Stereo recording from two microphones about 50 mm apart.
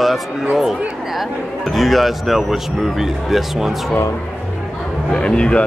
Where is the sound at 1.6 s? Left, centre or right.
Centre.